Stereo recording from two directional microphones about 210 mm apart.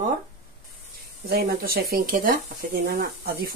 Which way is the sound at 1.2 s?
45° right (ahead or behind).